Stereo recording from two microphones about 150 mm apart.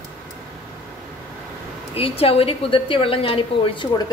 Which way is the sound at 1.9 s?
40° left (ahead or behind).